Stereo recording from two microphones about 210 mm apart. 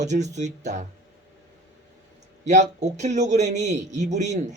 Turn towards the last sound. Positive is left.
turn(degrees=-35)  # may be behind; listen again after turning